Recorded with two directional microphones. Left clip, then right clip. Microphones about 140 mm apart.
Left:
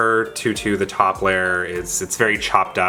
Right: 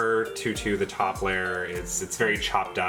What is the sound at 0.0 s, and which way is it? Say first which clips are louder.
Speech: left 7 dB; 30° left (ahead or behind).